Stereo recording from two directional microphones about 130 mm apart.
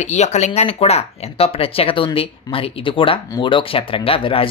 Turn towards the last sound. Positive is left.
turn(degrees=45)  # may be behind; listen again after turning